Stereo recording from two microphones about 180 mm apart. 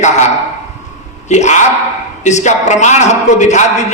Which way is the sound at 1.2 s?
40° left (ahead or behind).